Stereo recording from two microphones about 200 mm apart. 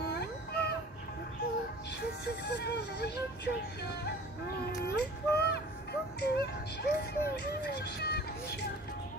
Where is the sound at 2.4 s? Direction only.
55° left (ahead or behind).